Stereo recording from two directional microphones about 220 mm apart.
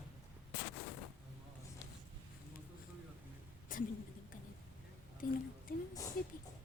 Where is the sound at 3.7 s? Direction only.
40° left (ahead or behind).